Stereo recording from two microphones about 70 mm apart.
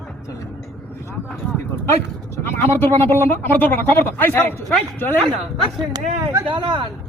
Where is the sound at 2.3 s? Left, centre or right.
Left.